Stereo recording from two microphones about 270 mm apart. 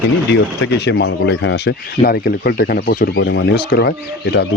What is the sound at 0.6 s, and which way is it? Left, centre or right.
Speech, left.